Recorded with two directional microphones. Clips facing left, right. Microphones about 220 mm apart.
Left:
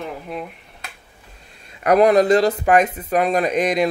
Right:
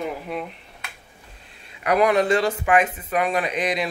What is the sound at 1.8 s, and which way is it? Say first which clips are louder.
Speech: left 5 dB; 40° left (ahead or behind).